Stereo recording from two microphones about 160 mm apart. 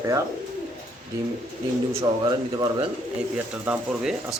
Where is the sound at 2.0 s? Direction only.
25° right (ahead or behind).